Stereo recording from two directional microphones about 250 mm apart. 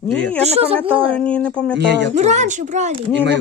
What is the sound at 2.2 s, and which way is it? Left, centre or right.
Speech, right.